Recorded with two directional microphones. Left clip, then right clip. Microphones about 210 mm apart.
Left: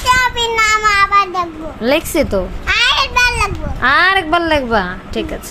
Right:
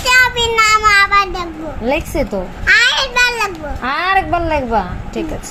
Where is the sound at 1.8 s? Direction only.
40° left (ahead or behind).